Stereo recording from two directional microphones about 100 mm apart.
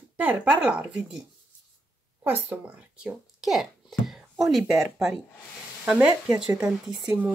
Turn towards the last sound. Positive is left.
turn(degrees=-15)  # may be behind; listen again after turning